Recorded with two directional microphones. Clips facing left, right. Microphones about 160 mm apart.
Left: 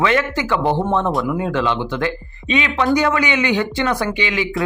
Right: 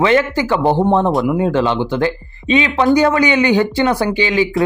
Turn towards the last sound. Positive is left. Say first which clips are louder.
# right 5 dB
turn(degrees=-35)  # may be behind; listen again after turning